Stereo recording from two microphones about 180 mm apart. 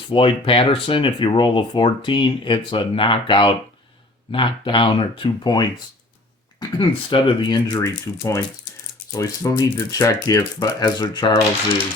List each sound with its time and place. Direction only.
0.1 s speech: 30° left (ahead or behind)